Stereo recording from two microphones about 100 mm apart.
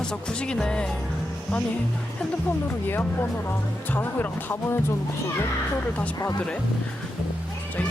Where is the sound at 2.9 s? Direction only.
20° left (ahead or behind).